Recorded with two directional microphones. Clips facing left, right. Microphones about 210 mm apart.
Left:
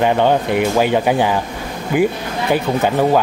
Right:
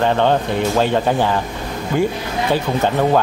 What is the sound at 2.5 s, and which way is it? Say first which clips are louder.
Speech: left 2 dB; 10° left (ahead or behind).